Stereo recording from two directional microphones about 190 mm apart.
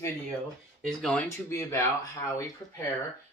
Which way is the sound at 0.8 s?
5° left (ahead or behind).